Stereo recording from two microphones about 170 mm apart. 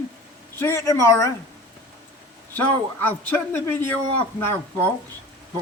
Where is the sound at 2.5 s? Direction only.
10° left (ahead or behind).